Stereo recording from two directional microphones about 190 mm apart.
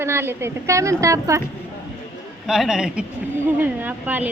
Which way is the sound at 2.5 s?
5° right (ahead or behind).